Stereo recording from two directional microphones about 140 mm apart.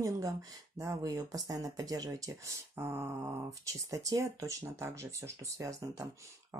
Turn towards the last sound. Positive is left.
turn(degrees=-25)  # may be behind; listen again after turning